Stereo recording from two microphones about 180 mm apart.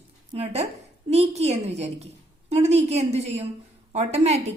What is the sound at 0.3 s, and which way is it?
A woman's voice, 35° right (ahead or behind).